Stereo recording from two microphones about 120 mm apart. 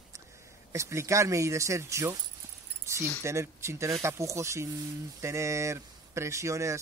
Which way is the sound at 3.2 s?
25° right (ahead or behind).